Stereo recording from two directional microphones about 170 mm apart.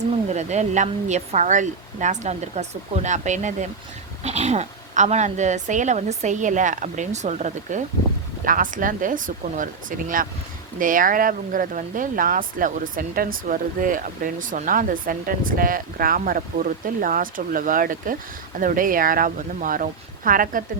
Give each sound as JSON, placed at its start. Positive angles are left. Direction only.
{"t": 0.3, "sound": "speech", "side_deg": -40}
{"t": 10.8, "sound": "speech", "side_deg": -50}